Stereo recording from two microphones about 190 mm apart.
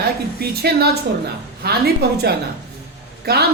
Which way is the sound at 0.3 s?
55° right (ahead or behind).